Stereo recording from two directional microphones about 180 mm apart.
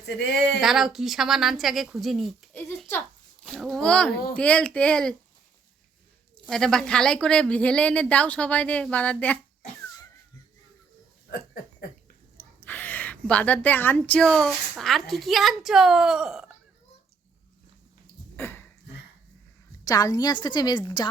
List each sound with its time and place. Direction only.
0.0 s speech: 70° left (ahead or behind)
0.6 s speech: centre (ahead or behind)
2.6 s a sound: 10° left (ahead or behind)
3.4 s speech: centre (ahead or behind)
6.5 s speech: 5° left (ahead or behind)
12.6 s speech: 10° left (ahead or behind)
18.3 s a sound: 10° left (ahead or behind)
19.8 s a woman's voice: 20° left (ahead or behind)